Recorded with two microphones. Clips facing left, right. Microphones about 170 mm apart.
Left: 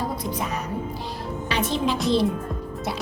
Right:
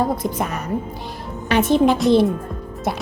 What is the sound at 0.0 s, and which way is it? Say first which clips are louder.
A woman's voice: right 7 dB; 55° right (ahead or behind).